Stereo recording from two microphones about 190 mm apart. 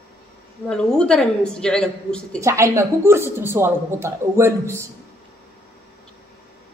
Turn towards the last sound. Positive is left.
turn(degrees=-15)  # may be behind; listen again after turning